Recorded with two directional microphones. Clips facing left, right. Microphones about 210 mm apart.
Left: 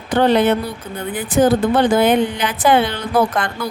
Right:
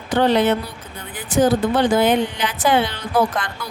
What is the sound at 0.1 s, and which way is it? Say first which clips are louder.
A woman's voice: left 2 dB; 55° left (ahead or behind).